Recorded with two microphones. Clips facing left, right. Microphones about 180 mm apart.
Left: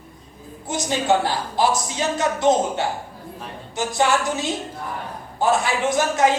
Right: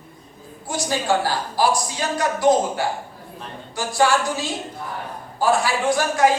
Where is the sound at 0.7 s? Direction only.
20° left (ahead or behind).